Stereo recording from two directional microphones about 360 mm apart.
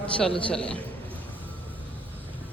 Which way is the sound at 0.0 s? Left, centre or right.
Centre.